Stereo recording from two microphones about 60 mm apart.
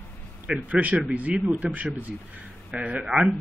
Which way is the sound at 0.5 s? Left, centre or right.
Right.